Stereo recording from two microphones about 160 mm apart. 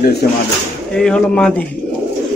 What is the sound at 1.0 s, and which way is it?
Speech, 5° left (ahead or behind).